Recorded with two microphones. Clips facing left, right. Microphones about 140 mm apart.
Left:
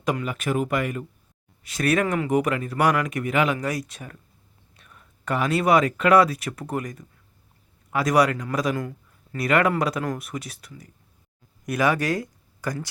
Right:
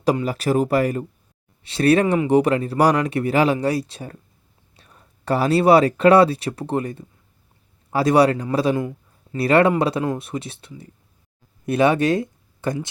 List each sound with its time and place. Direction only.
0.0 s a man's voice: 35° right (ahead or behind)